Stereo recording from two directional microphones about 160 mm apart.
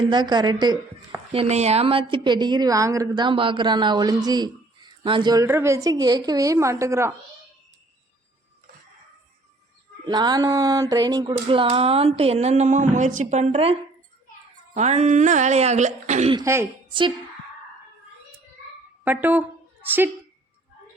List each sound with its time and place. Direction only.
0.0 s a woman's voice: 30° right (ahead or behind)
1.3 s a woman's voice: 40° right (ahead or behind); by 7.1 s 20° right (ahead or behind)
10.1 s a woman's voice: 25° right (ahead or behind); by 16.3 s 45° right (ahead or behind)
16.3 s a woman's voice: 20° right (ahead or behind)
19.0 s speech: 10° right (ahead or behind)